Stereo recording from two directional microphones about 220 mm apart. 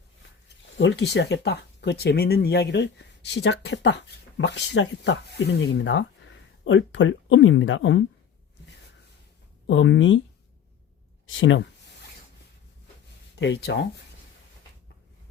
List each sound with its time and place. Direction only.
0.8 s a woman's voice: 55° left (ahead or behind)
9.6 s a woman's voice: 60° left (ahead or behind)
11.3 s a woman's voice: 60° left (ahead or behind)
13.4 s speech: 50° left (ahead or behind)